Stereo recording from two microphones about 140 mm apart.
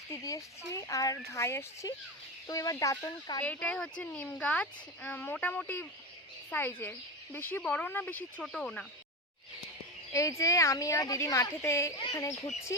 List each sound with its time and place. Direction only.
0.1 s speech: 25° left (ahead or behind)
3.4 s speech: 10° left (ahead or behind)
10.1 s speech: 20° left (ahead or behind)